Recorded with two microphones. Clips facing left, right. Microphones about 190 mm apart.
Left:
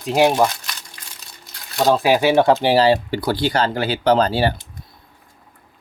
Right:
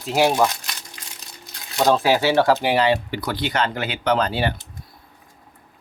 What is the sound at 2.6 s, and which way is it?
Speech, 30° left (ahead or behind).